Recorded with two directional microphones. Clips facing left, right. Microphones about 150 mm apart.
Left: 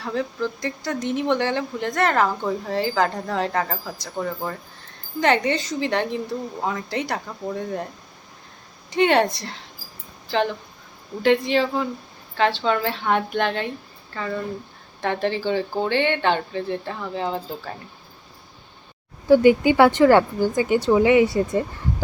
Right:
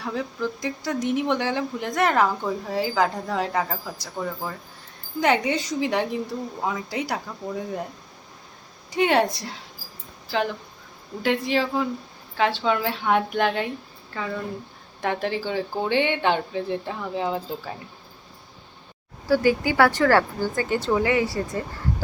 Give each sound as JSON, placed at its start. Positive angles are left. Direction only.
{"t": 0.0, "sound": "speech", "side_deg": -10}
{"t": 8.9, "sound": "speech", "side_deg": -5}
{"t": 19.3, "sound": "speech", "side_deg": 20}